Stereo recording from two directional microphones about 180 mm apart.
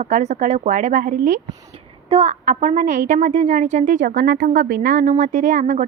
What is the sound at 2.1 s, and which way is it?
A woman's voice, 35° right (ahead or behind).